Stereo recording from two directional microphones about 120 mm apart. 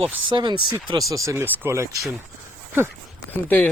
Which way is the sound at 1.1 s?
25° right (ahead or behind).